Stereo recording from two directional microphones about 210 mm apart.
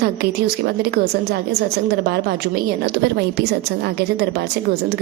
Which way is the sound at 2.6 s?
50° right (ahead or behind).